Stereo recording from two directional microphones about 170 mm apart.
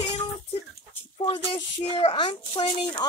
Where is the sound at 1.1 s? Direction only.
30° left (ahead or behind).